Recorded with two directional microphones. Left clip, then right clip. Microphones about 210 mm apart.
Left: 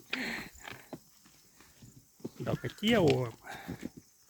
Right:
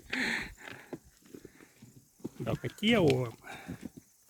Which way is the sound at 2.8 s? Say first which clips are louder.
Right 1 dB; 5° right (ahead or behind).